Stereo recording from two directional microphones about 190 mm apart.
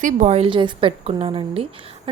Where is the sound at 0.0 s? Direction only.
40° right (ahead or behind).